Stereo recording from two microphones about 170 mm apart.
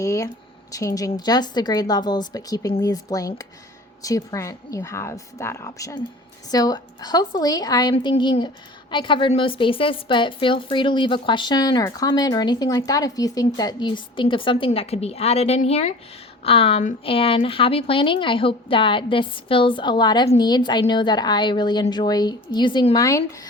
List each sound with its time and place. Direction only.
0.0 s a woman's voice: 20° left (ahead or behind)